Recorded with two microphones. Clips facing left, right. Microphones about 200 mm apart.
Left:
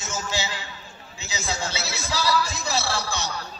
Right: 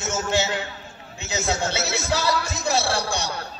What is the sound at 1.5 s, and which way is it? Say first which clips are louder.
Speech: right 5 dB; 55° right (ahead or behind).